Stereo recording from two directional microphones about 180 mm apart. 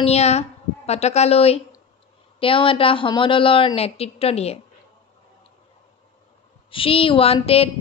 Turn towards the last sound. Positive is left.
turn(degrees=35)  # may be behind; listen again after turning